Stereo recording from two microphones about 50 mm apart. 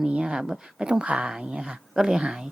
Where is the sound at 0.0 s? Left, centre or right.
Centre.